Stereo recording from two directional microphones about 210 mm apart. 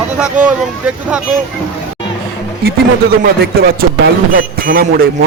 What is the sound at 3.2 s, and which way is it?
A man's voice, 45° right (ahead or behind).